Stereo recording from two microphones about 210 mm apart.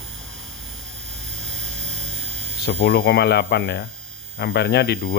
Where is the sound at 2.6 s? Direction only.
50° left (ahead or behind).